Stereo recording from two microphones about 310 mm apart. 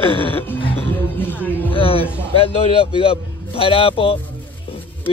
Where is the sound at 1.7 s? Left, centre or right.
Centre.